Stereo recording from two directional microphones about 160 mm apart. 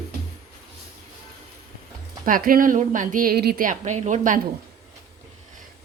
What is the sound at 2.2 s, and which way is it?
A woman's voice, 60° right (ahead or behind).